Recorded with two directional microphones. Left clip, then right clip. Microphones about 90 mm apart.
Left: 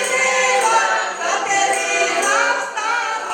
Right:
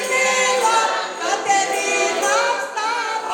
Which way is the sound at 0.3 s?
25° right (ahead or behind).